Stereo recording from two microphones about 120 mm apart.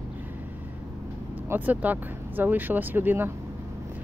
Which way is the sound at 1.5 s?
15° right (ahead or behind).